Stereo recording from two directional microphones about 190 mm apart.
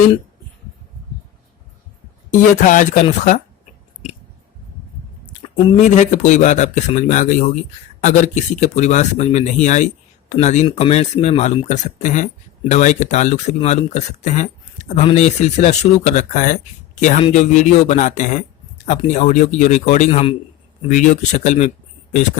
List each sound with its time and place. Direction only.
2.6 s speech: 40° left (ahead or behind)
5.2 s speech: 30° left (ahead or behind)